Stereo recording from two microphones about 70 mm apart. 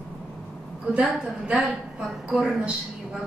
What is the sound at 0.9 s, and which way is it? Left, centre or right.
Speech, centre.